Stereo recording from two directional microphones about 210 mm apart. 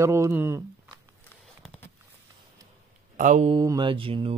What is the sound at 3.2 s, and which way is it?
Speech, 35° right (ahead or behind).